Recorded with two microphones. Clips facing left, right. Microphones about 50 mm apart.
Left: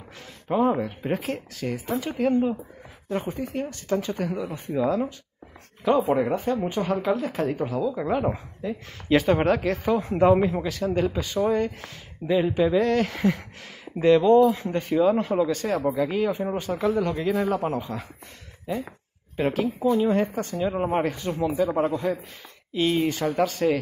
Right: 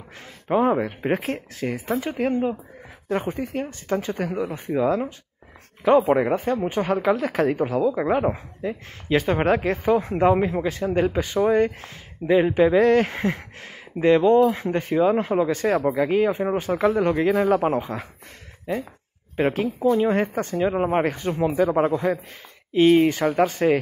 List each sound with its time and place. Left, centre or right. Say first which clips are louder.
0.5 s speech: right 2 dB; right
2.0 s speech: left 2 dB; right
6.1 s speech: right 2 dB; right
7.7 s speech: right 4 dB; right
9.1 s speech: left 1 dB; centre
9.4 s speech: right 2 dB; right
9.8 s speech: right 1 dB; centre
10.6 s speech: right 3 dB; right
14.4 s speech: even; right
14.9 s speech: right 1 dB; right
15.5 s speech: right 3 dB; right
19.4 s speech: right 2 dB; right
20.5 s speech: right 4 dB; right
21.0 s speech: right 3 dB; right